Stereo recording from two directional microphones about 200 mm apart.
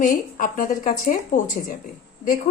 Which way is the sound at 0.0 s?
40° left (ahead or behind).